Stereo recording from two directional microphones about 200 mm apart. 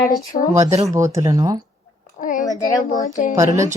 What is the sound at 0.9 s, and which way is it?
Speech, 15° right (ahead or behind).